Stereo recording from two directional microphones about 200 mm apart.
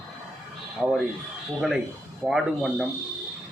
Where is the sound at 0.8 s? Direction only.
Centre (ahead or behind).